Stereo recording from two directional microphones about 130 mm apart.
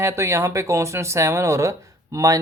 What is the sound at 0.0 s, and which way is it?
Speech, 20° right (ahead or behind).